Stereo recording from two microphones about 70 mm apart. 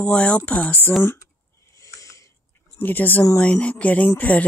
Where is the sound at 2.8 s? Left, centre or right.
Left.